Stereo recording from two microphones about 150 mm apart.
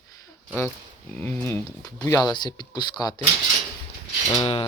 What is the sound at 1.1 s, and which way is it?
Speech, 10° left (ahead or behind).